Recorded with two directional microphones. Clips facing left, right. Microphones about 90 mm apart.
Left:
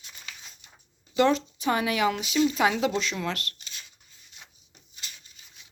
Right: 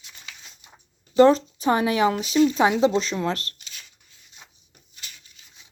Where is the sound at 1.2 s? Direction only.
35° right (ahead or behind).